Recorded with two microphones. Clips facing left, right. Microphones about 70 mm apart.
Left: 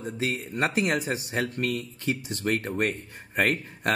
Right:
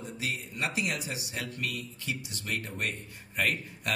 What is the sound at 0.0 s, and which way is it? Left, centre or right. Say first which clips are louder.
Speech: left 6 dB; left.